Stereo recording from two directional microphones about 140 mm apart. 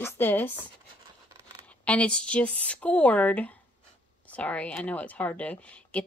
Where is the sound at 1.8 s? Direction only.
10° left (ahead or behind).